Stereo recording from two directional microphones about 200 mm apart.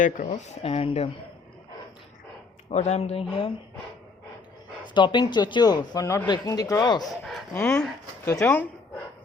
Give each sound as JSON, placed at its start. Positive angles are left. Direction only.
{"t": 0.0, "sound": "speech", "side_deg": 40}
{"t": 2.6, "sound": "speech", "side_deg": 35}
{"t": 4.9, "sound": "speech", "side_deg": 25}
{"t": 7.0, "sound": "speech", "side_deg": 0}